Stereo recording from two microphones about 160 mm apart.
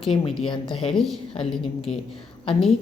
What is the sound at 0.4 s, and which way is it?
Speech, 30° left (ahead or behind).